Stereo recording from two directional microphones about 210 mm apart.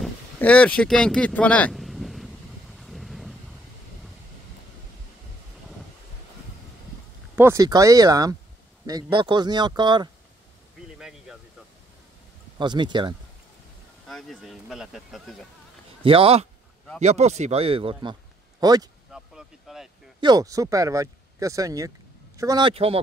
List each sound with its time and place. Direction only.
0.0 s vehicle: 5° left (ahead or behind)
7.3 s speech: 15° right (ahead or behind)
11.0 s a sound: centre (ahead or behind)
12.5 s speech: 20° right (ahead or behind)
14.0 s speech: centre (ahead or behind)
16.0 s speech: 25° right (ahead or behind)
19.1 s vehicle: centre (ahead or behind)
20.2 s speech: 20° right (ahead or behind)